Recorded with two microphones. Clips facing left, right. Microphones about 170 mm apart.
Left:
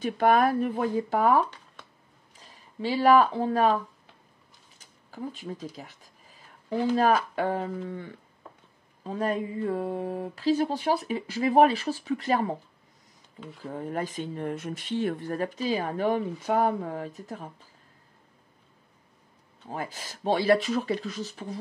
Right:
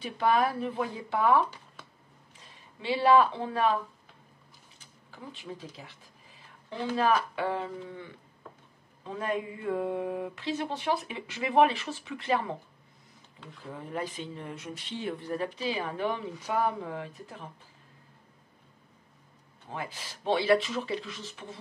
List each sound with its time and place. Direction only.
0.0 s speech: 50° left (ahead or behind)
4.7 s speech: 40° left (ahead or behind)
7.0 s speech: 45° left (ahead or behind)
13.7 s speech: 45° left (ahead or behind)
19.7 s speech: 40° left (ahead or behind)